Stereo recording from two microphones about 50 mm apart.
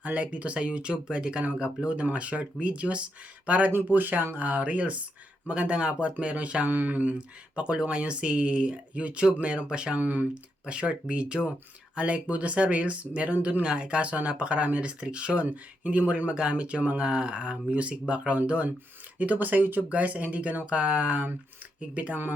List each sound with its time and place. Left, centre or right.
0.0 s speech: right
3.9 s speech: right
6.7 s speech: right
7.2 s speech: right
9.9 s speech: right
10.3 s speech: right
16.3 s speech: centre